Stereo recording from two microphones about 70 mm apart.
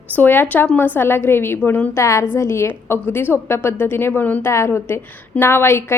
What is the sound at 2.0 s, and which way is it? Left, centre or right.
A woman's voice, left.